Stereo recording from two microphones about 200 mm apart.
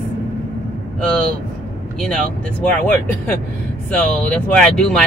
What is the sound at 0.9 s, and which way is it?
Speech, 5° left (ahead or behind).